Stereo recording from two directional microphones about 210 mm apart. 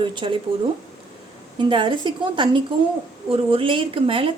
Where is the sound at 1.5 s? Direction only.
20° right (ahead or behind).